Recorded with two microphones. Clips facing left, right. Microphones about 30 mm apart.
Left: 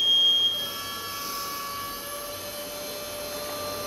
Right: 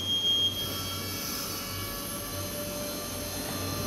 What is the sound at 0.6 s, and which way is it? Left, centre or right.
Train, centre.